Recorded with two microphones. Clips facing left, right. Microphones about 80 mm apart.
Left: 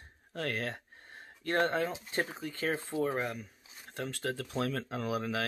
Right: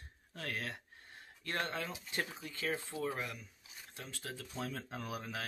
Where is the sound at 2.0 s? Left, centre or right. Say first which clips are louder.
Left 6 dB; left.